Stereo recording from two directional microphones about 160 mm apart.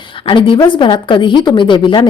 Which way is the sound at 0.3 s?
30° left (ahead or behind).